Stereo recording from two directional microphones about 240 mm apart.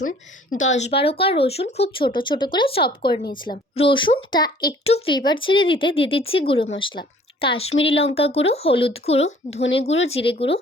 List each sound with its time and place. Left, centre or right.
0.5 s speech: left
7.7 s speech: left
7.9 s speech: left
9.5 s speech: left
9.7 s speech: left